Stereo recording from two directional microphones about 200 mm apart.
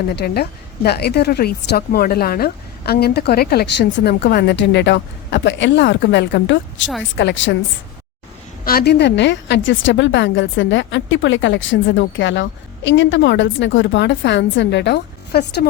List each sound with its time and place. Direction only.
0.2 s a woman's voice: 50° left (ahead or behind)
8.6 s a woman's voice: 50° left (ahead or behind)